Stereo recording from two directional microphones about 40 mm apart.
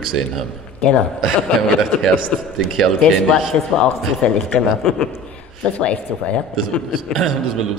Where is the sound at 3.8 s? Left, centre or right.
Left.